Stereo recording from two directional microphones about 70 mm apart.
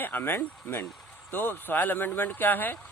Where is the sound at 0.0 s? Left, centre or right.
Left.